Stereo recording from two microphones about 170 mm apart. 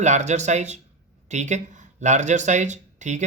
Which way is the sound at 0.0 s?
45° right (ahead or behind).